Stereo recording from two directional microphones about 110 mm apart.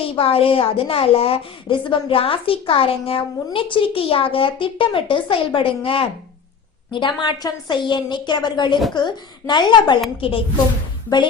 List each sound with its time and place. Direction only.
0.0 s a woman's voice: 60° left (ahead or behind); by 10.0 s 40° left (ahead or behind)
10.2 s a woman's voice: 55° left (ahead or behind)